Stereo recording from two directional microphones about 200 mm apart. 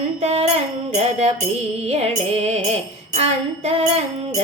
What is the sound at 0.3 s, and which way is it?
Music, 30° right (ahead or behind).